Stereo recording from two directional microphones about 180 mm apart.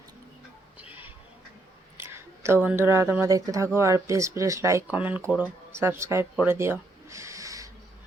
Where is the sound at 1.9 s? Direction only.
15° right (ahead or behind).